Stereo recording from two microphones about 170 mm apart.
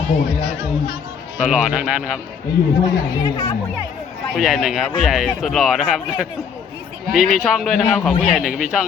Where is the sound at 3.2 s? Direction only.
25° left (ahead or behind).